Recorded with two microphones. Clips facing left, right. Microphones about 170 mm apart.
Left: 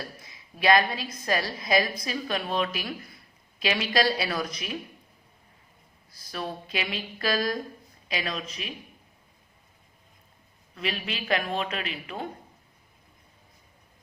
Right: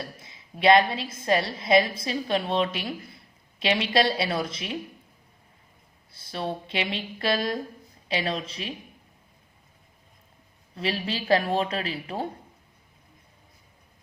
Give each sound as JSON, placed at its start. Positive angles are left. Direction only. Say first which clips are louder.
{"t": 0.0, "sound": "a woman's voice", "louder": "right 2 dB", "side_deg": -25}
{"t": 6.1, "sound": "a woman's voice", "louder": "right 3 dB", "side_deg": -25}
{"t": 10.8, "sound": "a woman's voice", "louder": "right 4 dB", "side_deg": -30}